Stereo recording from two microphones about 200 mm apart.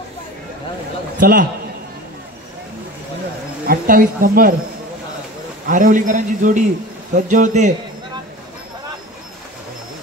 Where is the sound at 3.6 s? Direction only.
45° right (ahead or behind).